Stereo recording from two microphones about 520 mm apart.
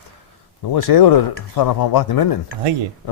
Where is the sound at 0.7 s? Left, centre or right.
Left.